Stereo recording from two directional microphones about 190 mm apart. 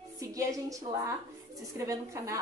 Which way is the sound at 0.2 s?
15° right (ahead or behind).